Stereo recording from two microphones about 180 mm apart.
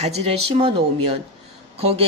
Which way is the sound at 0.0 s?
35° right (ahead or behind).